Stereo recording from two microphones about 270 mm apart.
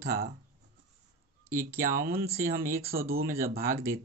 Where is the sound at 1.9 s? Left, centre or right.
Right.